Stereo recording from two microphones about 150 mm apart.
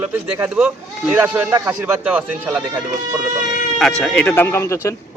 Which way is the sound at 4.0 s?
5° left (ahead or behind).